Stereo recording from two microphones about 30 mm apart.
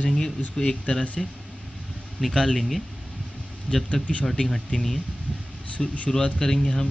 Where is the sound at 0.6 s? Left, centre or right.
Left.